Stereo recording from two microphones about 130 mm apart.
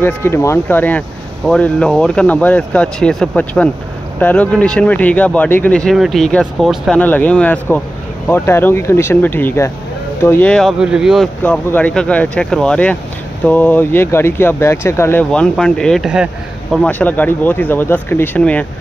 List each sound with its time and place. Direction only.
0.0 s speech: 20° left (ahead or behind); by 7.0 s centre (ahead or behind)
7.0 s speech: 15° left (ahead or behind)
10.8 s speech: 5° right (ahead or behind)
11.4 s speech: 10° left (ahead or behind)
16.8 s speech: 10° left (ahead or behind)